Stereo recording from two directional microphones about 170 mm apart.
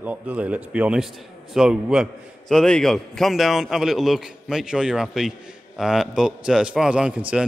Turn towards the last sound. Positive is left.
turn(degrees=-5)  # may be behind; listen again after turning